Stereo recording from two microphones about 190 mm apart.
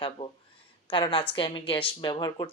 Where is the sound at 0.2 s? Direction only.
25° left (ahead or behind).